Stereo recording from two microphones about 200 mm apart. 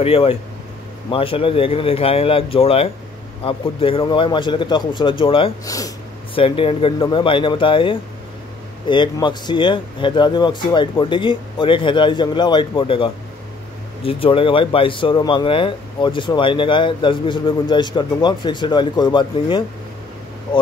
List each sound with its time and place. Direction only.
0.0 s speech: 30° left (ahead or behind)